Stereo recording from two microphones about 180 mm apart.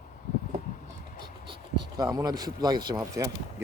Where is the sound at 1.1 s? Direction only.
25° right (ahead or behind).